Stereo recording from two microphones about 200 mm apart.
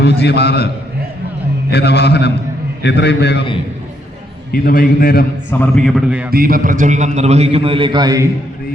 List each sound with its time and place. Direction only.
0.0 s a man's voice: 55° left (ahead or behind)
1.7 s a man's voice: 55° left (ahead or behind)
4.5 s a man's voice: 45° left (ahead or behind)
5.5 s a man's voice: 5° left (ahead or behind)
6.3 s a man's voice: 45° right (ahead or behind); by 8.3 s 20° right (ahead or behind)